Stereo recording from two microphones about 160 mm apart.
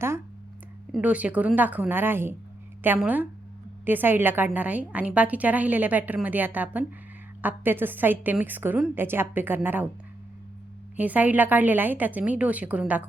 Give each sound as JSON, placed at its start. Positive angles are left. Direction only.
{"t": 0.9, "sound": "a woman's voice", "side_deg": -10}
{"t": 10.9, "sound": "a woman's voice", "side_deg": -10}